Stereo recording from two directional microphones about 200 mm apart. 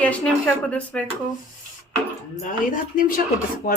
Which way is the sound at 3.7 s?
50° left (ahead or behind).